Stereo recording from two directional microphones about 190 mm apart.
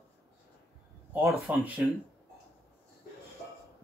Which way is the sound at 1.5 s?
10° right (ahead or behind).